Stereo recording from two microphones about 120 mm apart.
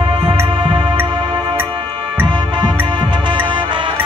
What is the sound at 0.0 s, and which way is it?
Music, 45° right (ahead or behind).